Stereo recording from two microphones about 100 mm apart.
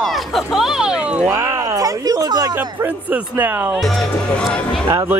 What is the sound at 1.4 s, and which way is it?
Speech, 30° right (ahead or behind).